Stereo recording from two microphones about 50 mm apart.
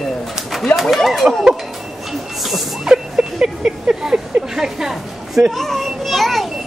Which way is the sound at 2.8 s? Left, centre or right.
Centre.